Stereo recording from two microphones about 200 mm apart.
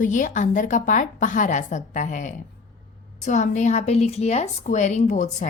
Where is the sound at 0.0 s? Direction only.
40° left (ahead or behind).